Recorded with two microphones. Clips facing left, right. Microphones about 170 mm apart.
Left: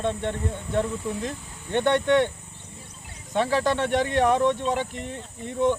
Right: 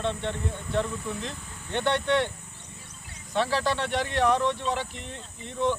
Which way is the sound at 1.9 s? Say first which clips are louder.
Left 5 dB; 50° left (ahead or behind).